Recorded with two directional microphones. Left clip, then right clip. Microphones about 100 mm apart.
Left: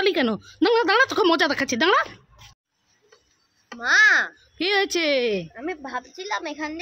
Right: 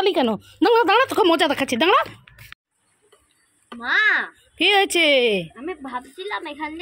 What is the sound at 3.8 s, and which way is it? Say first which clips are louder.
Speech: left 2 dB; 45° left (ahead or behind).